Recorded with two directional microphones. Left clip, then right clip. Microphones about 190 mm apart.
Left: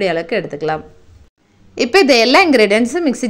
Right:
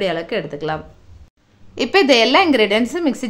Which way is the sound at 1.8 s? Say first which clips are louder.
Left 2 dB; 15° left (ahead or behind).